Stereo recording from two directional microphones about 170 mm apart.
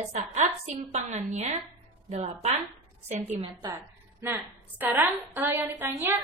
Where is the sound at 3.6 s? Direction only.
25° right (ahead or behind).